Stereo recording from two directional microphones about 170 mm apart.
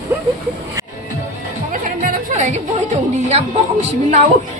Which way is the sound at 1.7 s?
50° right (ahead or behind).